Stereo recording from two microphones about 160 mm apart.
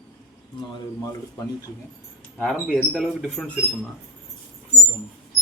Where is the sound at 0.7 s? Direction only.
25° left (ahead or behind).